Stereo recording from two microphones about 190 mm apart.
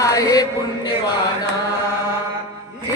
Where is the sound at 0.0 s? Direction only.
20° left (ahead or behind).